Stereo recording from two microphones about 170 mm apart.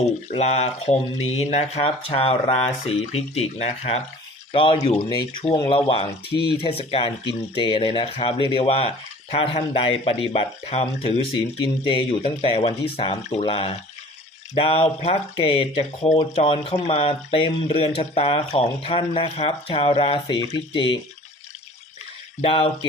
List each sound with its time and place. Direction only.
0.3 s speech: 40° left (ahead or behind)
22.4 s speech: 30° left (ahead or behind)